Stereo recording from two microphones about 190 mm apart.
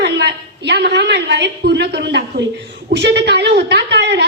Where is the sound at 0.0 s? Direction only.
60° right (ahead or behind).